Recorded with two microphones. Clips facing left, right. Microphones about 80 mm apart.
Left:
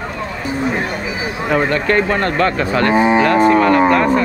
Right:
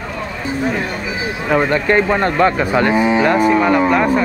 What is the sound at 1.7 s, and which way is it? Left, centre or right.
Speech, centre.